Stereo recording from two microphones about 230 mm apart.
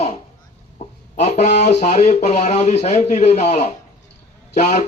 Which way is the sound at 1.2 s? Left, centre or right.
Left.